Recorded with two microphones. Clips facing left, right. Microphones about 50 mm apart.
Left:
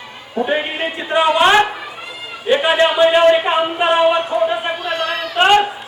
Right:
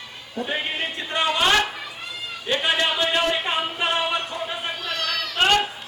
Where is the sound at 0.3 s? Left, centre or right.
Centre.